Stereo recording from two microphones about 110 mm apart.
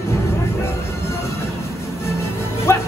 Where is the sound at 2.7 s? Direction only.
25° left (ahead or behind).